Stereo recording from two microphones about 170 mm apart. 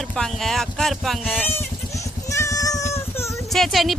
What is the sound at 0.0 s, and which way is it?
Speech, 5° left (ahead or behind).